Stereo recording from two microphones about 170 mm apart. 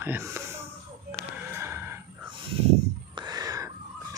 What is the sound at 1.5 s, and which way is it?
Gasp, 15° right (ahead or behind).